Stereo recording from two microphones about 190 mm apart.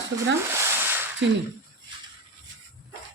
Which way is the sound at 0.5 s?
10° right (ahead or behind).